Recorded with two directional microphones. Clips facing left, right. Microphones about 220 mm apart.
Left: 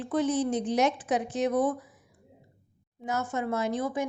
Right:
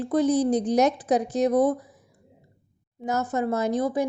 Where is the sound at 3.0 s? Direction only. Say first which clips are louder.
Right 5 dB; 40° right (ahead or behind).